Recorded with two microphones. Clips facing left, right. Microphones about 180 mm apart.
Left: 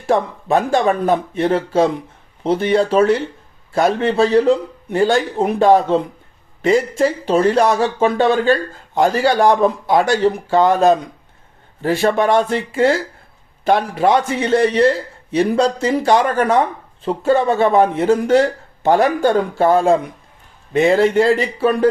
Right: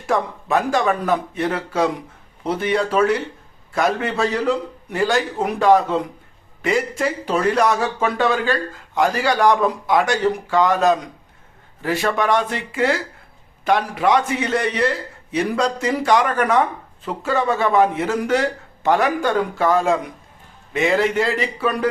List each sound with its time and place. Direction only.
0.1 s a man's voice: 30° left (ahead or behind)